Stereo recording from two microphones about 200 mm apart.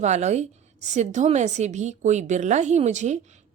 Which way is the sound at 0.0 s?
35° right (ahead or behind).